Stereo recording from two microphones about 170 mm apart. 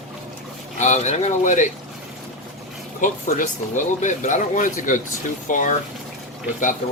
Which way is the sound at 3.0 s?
50° left (ahead or behind).